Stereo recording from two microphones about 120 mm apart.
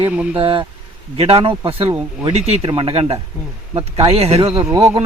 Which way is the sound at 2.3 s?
60° right (ahead or behind).